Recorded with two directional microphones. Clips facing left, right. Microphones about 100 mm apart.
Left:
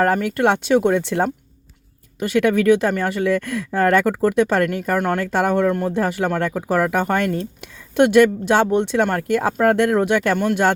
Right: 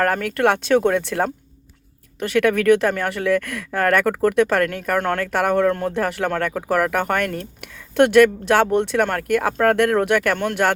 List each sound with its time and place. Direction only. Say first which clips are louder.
0.0 s speech: left 1 dB; 20° left (ahead or behind)
4.9 s speech: even; 10° left (ahead or behind)
5.3 s speech: even; 20° left (ahead or behind)
10.3 s speech: left 3 dB; 10° left (ahead or behind)